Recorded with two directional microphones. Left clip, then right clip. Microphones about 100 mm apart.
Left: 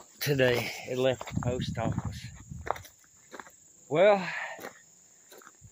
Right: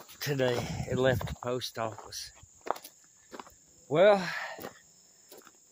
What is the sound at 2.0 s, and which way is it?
Cricket, 5° left (ahead or behind).